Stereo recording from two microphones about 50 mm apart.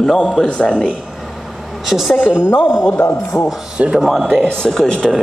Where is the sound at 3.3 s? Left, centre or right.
Left.